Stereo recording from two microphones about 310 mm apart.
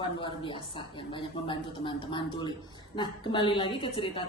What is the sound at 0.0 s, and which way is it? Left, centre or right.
A woman's voice, centre.